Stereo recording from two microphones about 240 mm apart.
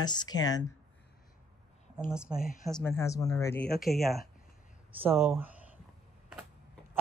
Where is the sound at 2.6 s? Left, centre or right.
Centre.